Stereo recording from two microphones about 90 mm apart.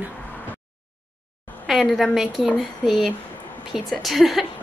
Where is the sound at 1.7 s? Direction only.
Centre (ahead or behind).